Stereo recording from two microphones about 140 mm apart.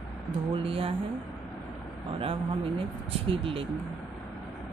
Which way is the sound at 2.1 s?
40° right (ahead or behind).